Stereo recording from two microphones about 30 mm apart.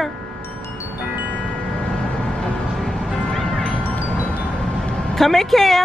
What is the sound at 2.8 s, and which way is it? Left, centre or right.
Music, left.